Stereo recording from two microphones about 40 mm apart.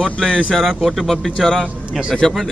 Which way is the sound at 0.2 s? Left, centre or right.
Centre.